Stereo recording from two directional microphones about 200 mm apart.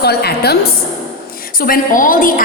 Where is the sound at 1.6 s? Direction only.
45° left (ahead or behind).